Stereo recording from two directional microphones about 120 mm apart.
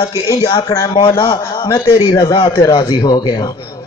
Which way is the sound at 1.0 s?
40° left (ahead or behind).